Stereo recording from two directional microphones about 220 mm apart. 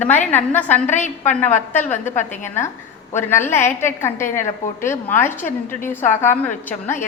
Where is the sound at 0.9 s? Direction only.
35° left (ahead or behind).